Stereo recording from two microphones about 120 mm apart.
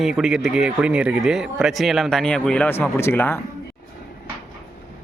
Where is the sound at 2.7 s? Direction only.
20° left (ahead or behind).